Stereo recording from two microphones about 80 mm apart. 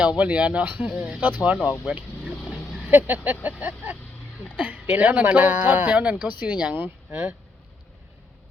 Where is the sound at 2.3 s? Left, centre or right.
Centre.